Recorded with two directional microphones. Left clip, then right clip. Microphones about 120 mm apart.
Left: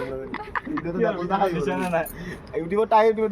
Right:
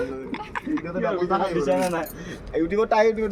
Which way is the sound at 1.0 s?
15° left (ahead or behind).